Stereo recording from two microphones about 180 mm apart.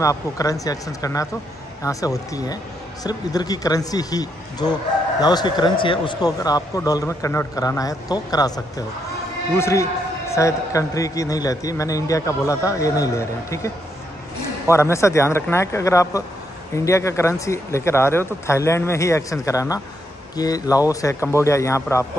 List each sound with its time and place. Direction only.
0.0 s a man's voice: 20° left (ahead or behind)
14.7 s a man's voice: 15° left (ahead or behind)